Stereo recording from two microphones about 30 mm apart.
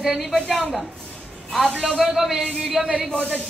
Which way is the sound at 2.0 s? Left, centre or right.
Centre.